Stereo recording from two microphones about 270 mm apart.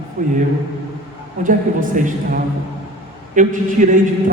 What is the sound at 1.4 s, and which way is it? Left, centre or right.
A man's voice, right.